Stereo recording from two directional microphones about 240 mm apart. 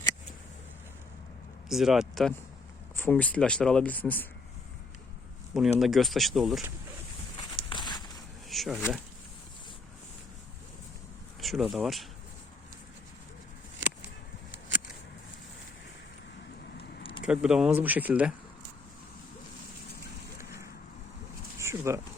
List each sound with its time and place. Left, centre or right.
1.7 s speech: centre
5.5 s speech: centre
7.3 s walk: centre
8.4 s speech: centre
11.3 s speech: centre
17.0 s a sound: left
17.2 s speech: centre
20.4 s a sound: centre
21.6 s pigeon: centre